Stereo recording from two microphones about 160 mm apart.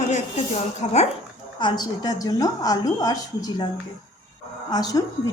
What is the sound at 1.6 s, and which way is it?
A woman's voice, 25° left (ahead or behind).